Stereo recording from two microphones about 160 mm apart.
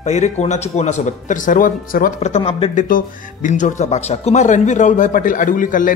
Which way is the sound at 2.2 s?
40° left (ahead or behind).